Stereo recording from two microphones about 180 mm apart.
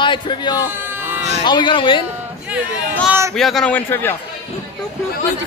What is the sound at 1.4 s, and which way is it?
Speech, 25° left (ahead or behind).